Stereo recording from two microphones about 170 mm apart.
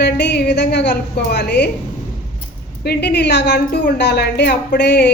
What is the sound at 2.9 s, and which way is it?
Speech, 80° left.